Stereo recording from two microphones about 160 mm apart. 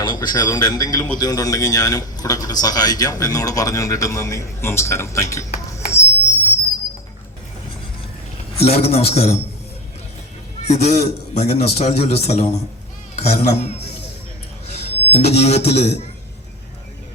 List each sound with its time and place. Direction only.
0.0 s a man's voice: 25° left (ahead or behind)
5.5 s a sound: 15° left (ahead or behind)
8.5 s a man's voice: 40° left (ahead or behind)
10.7 s a man's voice: 45° left (ahead or behind)